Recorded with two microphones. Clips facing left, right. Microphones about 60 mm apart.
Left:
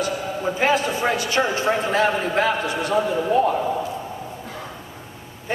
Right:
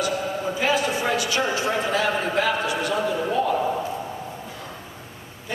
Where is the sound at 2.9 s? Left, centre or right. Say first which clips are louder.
Left 6 dB; left.